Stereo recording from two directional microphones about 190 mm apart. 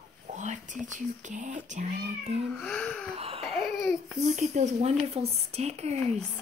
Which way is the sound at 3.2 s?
30° right (ahead or behind).